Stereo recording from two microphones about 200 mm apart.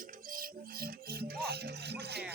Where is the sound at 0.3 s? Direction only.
50° right (ahead or behind).